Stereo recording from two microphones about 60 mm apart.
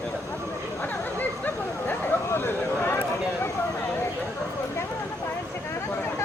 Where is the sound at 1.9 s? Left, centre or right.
Left.